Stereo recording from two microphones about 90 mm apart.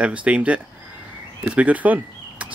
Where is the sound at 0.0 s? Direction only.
15° right (ahead or behind).